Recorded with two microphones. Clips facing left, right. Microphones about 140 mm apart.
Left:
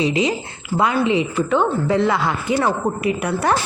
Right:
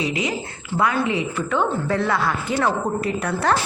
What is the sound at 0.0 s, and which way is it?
A woman's voice, 25° left (ahead or behind).